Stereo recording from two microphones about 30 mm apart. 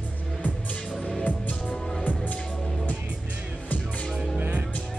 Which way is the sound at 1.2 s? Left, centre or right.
Left.